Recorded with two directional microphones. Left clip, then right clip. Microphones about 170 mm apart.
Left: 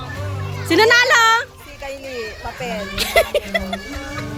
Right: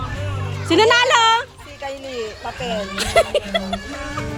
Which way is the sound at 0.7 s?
5° left (ahead or behind).